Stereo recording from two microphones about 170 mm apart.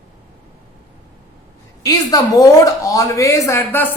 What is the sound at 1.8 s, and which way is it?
A woman's voice, 20° left (ahead or behind).